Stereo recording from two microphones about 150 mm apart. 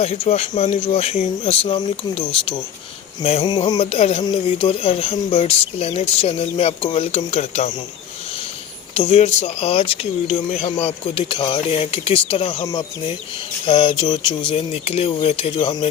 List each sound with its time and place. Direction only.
0.0 s speech: 45° left (ahead or behind)
3.5 s speech: 30° left (ahead or behind)
9.0 s speech: 45° left (ahead or behind)
13.7 s speech: 35° left (ahead or behind)